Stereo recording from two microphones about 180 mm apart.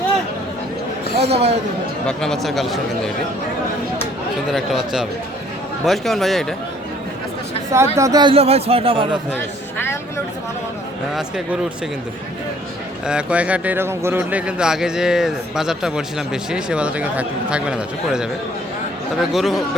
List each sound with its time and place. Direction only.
1.2 s speech: 35° right (ahead or behind)
2.0 s speech: 5° left (ahead or behind)
4.4 s speech: centre (ahead or behind)
7.9 s speech: 20° right (ahead or behind)
11.1 s speech: 5° right (ahead or behind)
13.1 s speech: 5° right (ahead or behind)